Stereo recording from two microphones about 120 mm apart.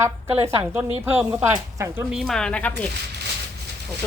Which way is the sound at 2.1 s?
Centre (ahead or behind).